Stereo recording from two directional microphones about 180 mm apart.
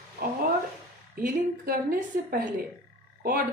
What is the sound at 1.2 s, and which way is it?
A woman's voice, 55° right (ahead or behind).